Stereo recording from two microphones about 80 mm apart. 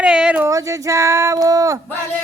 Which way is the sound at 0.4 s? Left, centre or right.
Right.